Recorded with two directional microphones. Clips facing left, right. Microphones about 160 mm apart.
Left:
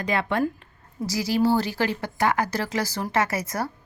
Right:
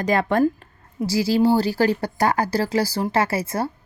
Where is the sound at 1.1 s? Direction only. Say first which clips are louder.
Right 4 dB; 30° right (ahead or behind).